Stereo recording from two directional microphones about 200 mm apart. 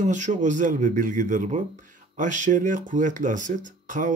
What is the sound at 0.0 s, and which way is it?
Speech, 40° right (ahead or behind).